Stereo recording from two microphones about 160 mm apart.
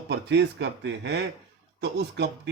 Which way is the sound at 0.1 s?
90° right.